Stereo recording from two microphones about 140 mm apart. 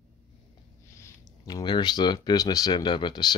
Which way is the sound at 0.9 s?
25° left (ahead or behind).